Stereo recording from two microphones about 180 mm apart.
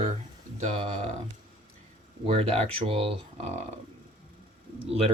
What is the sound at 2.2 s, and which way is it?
Speech, 30° right (ahead or behind).